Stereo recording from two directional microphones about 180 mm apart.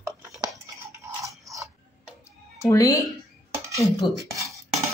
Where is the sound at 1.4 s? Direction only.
15° right (ahead or behind).